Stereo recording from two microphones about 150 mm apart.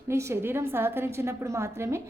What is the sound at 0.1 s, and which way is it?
A woman's voice, 20° right (ahead or behind).